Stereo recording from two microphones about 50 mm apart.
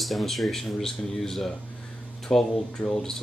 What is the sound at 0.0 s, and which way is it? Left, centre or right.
Speech, centre.